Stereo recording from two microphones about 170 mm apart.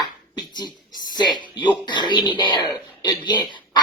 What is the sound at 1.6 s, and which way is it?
Speech, 25° left (ahead or behind).